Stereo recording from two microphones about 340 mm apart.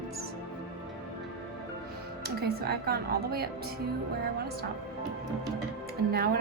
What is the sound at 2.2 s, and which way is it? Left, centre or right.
Speech, right.